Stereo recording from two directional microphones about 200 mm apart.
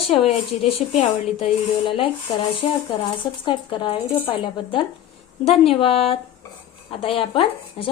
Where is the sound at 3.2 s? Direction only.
25° left (ahead or behind).